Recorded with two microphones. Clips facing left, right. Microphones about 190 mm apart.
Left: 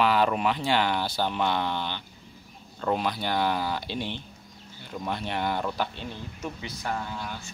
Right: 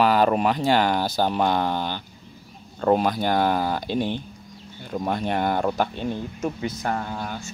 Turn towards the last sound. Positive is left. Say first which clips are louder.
# right 5 dB
turn(degrees=-50)  # may be behind; listen again after turning